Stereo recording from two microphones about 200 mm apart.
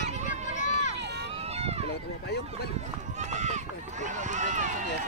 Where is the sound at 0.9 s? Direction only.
60° right (ahead or behind).